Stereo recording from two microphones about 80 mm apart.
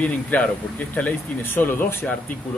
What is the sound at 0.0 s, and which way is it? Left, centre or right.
Speech, centre.